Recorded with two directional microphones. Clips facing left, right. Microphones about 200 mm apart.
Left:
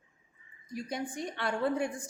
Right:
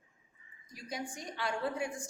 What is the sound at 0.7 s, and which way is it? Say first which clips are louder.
A woman's voice: left 6 dB; 55° left (ahead or behind).